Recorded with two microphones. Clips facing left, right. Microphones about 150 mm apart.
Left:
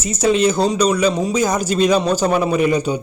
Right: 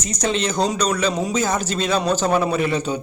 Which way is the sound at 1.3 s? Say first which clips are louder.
Left 4 dB; 15° left (ahead or behind).